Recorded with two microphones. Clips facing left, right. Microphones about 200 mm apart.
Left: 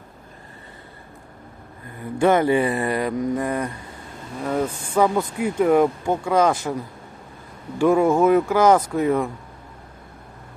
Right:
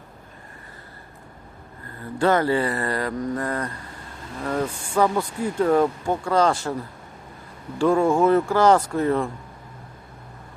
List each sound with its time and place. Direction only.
2.0 s speech: 20° left (ahead or behind)
7.9 s speech: 5° left (ahead or behind)
8.4 s speech: 15° left (ahead or behind)